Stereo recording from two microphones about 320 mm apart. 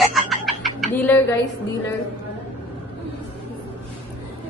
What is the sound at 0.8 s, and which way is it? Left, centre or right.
Speech, centre.